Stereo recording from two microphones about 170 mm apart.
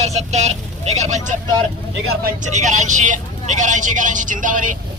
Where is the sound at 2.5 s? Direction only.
45° right (ahead or behind).